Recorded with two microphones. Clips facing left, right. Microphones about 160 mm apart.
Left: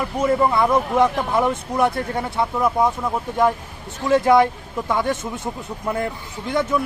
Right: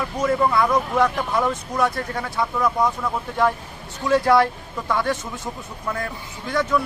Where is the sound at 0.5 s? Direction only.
20° left (ahead or behind).